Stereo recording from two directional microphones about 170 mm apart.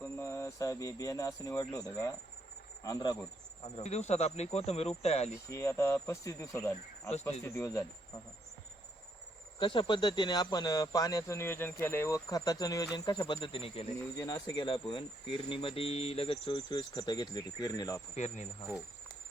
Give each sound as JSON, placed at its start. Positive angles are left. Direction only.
{"t": 0.0, "sound": "speech", "side_deg": 15}
{"t": 3.6, "sound": "speech", "side_deg": 35}
{"t": 5.5, "sound": "speech", "side_deg": 15}
{"t": 9.6, "sound": "speech", "side_deg": 30}
{"t": 14.2, "sound": "speech", "side_deg": 20}
{"t": 18.1, "sound": "speech", "side_deg": 45}